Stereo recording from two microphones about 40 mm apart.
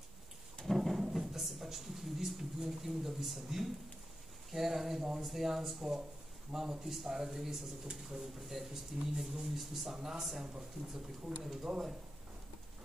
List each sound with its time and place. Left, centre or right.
0.7 s drawer open or close: centre
1.1 s a sound: centre
4.5 s a man's voice: centre
7.9 s speech: right
8.4 s a man's voice: centre